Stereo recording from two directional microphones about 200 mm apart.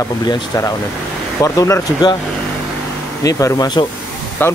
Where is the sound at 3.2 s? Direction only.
15° left (ahead or behind).